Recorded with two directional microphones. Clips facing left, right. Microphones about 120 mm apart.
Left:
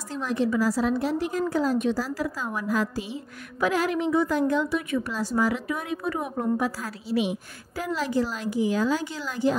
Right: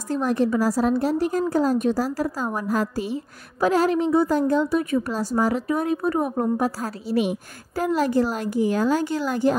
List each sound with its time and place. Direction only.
0.1 s a woman's voice: 50° right (ahead or behind)
3.6 s a woman's voice: 35° right (ahead or behind); by 9.6 s 55° right (ahead or behind)